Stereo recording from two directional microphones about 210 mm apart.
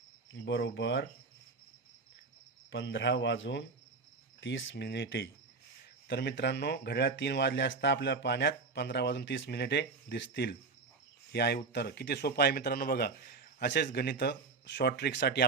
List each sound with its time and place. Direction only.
0.4 s speech: 55° left (ahead or behind)
2.7 s speech: 60° left (ahead or behind)